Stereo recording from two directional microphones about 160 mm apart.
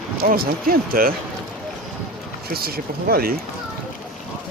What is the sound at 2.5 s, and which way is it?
Speech, 70° right (ahead or behind).